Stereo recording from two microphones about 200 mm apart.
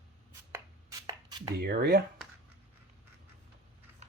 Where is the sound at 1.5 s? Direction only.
55° right (ahead or behind).